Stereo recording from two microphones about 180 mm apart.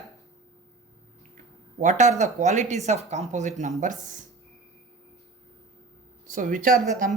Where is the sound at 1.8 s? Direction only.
40° right (ahead or behind).